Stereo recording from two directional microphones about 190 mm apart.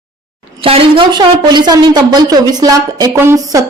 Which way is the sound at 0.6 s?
30° right (ahead or behind).